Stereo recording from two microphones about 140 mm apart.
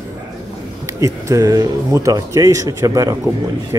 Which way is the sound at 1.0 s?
25° right (ahead or behind).